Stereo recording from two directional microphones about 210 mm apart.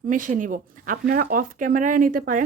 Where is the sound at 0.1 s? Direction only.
40° right (ahead or behind).